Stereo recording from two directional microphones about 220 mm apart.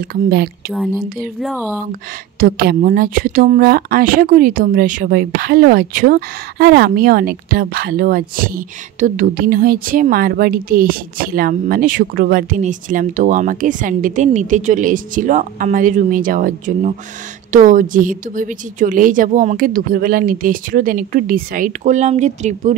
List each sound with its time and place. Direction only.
0.1 s speech: 45° right (ahead or behind)
2.6 s speech: 45° right (ahead or behind)